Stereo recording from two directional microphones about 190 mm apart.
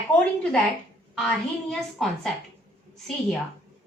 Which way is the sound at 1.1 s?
Centre (ahead or behind).